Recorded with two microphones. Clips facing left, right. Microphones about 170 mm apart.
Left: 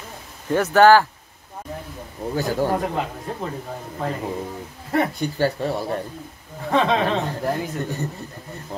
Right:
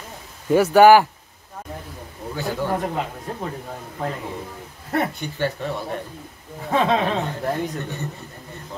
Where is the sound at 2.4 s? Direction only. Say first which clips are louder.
Left 3 dB; 40° left (ahead or behind).